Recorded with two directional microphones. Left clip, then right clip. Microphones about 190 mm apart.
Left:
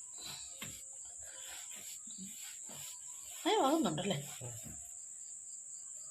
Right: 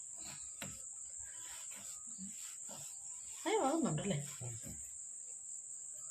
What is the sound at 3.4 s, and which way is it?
Speech, 35° left (ahead or behind).